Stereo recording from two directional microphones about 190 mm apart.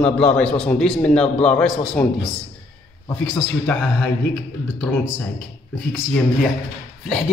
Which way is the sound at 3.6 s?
10° left (ahead or behind).